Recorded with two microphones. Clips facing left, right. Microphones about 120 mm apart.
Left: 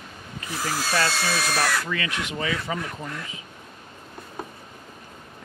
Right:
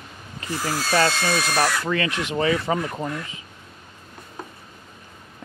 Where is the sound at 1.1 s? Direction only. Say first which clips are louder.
Right 2 dB; centre (ahead or behind).